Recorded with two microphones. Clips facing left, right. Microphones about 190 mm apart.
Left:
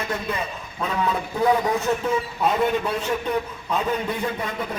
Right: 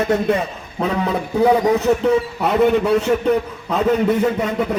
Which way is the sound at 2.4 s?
70° right (ahead or behind).